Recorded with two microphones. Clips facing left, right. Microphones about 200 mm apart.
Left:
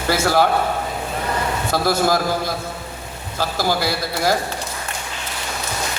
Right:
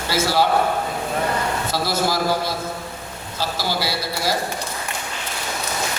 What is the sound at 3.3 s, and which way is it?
A man's voice, 50° left (ahead or behind).